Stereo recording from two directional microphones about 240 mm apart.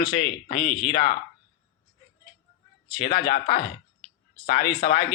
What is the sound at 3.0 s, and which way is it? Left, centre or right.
Speech, left.